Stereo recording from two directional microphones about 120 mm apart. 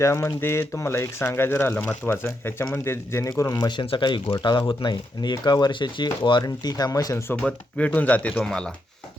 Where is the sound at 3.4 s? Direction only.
35° left (ahead or behind).